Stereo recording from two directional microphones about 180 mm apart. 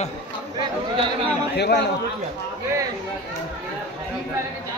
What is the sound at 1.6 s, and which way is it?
Speech, 70° left (ahead or behind).